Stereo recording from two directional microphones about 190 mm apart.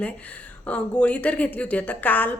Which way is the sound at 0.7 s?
5° left (ahead or behind).